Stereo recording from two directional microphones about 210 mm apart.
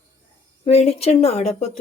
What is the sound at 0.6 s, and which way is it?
Speech, 30° left (ahead or behind).